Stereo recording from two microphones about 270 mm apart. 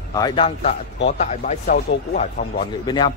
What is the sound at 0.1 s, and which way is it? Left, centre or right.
Speech, centre.